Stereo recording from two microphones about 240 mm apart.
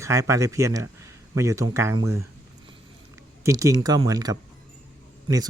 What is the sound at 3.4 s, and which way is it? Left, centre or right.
Speech, centre.